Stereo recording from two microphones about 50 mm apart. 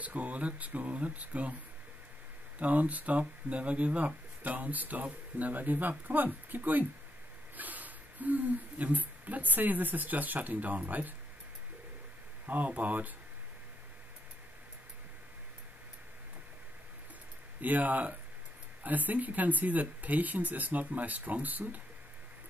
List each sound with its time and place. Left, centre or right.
0.0 s speech: right
2.6 s speech: right
12.4 s speech: right
17.6 s speech: right